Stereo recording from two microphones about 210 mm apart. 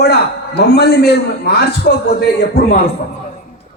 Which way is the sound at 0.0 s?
50° left (ahead or behind).